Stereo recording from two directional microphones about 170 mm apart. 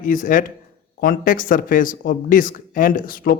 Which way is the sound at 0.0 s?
50° left (ahead or behind).